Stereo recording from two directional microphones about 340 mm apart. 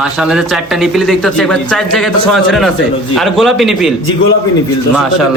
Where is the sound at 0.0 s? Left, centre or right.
Centre.